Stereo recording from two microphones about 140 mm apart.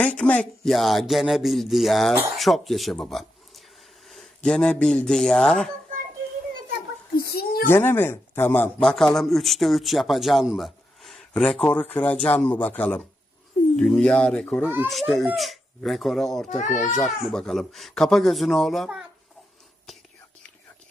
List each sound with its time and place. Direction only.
0.0 s speech: 10° left (ahead or behind)
7.2 s a sound: 90° left
7.7 s speech: 15° left (ahead or behind)
8.8 s speech: 5° left (ahead or behind)
14.6 s speech: 15° right (ahead or behind)
14.8 s speech: centre (ahead or behind)
16.5 s a child's voice: 60° left (ahead or behind)
17.0 s speech: 5° left (ahead or behind)